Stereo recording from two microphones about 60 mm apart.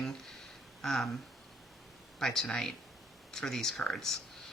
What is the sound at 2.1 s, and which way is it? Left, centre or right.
Speech, centre.